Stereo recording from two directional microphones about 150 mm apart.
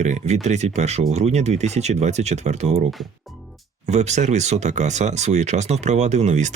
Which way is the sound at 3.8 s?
50° right (ahead or behind).